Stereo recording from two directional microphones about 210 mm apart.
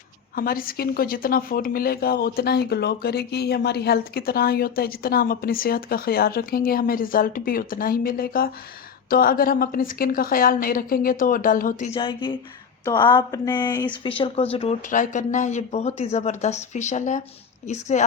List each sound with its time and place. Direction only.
0.3 s speech: 45° left (ahead or behind)
11.9 s speech: 25° left (ahead or behind)